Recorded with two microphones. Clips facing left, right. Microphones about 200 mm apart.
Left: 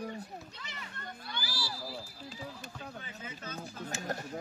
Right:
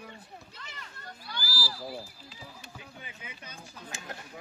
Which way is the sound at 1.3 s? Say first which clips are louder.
Right 2 dB; 25° left (ahead or behind).